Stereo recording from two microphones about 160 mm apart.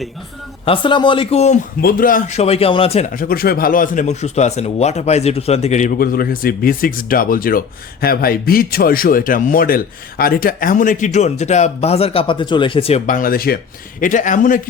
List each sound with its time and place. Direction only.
0.6 s a man's voice: 35° left (ahead or behind)
1.8 s a man's voice: 65° left (ahead or behind); by 3.1 s 40° left (ahead or behind)
3.1 s speech: 65° left (ahead or behind); by 13.0 s 35° left (ahead or behind)
13.1 s speech: 60° left (ahead or behind)
14.0 s a man's voice: 55° left (ahead or behind)